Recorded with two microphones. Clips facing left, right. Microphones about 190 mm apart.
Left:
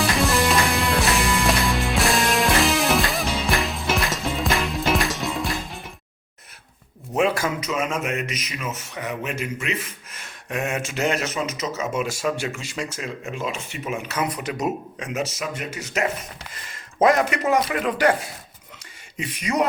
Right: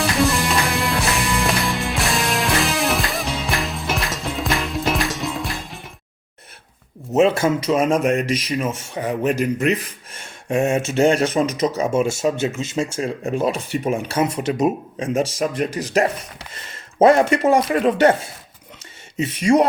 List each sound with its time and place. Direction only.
0.3 s music: centre (ahead or behind)
7.1 s a man's voice: 25° right (ahead or behind)